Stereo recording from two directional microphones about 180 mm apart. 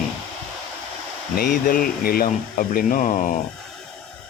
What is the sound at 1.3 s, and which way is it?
Speech, 50° left (ahead or behind).